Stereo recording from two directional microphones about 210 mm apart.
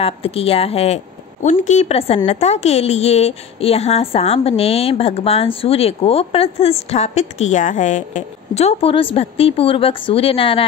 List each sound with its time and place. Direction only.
0.0 s a woman's voice: 25° left (ahead or behind)